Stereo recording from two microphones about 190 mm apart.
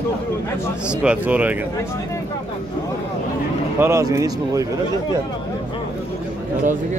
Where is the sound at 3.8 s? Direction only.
15° right (ahead or behind).